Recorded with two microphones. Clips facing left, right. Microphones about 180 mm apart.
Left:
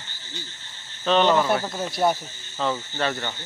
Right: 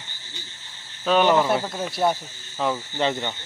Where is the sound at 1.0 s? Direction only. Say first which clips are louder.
Right 1 dB; 10° right (ahead or behind).